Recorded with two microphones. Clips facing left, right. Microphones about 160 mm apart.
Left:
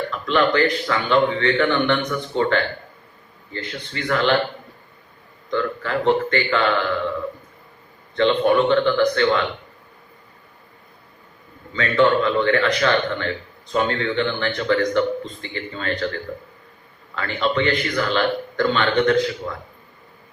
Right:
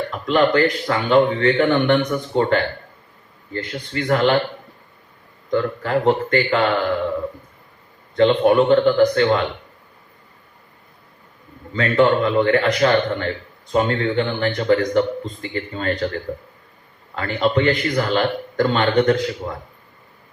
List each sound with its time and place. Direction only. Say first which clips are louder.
0.1 s speech: right 3 dB; 40° right (ahead or behind)
5.5 s speech: right 3 dB; 40° right (ahead or behind)
8.1 s speech: right 3 dB; 35° right (ahead or behind)
11.7 s speech: right 1 dB; 40° right (ahead or behind)
17.2 s speech: right 3 dB; 40° right (ahead or behind)